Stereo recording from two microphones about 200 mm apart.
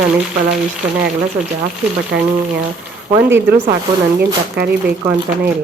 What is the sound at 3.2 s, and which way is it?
Speech, 10° right (ahead or behind).